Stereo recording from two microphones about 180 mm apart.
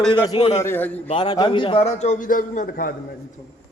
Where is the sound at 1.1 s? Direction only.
25° left (ahead or behind); by 2.9 s 50° left (ahead or behind).